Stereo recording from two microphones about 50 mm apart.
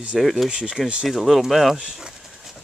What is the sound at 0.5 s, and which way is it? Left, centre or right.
Speech, centre.